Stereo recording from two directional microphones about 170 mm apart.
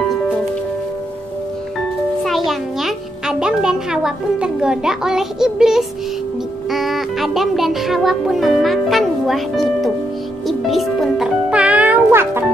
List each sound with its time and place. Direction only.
2.2 s a child's voice: centre (ahead or behind)
10.7 s music: centre (ahead or behind)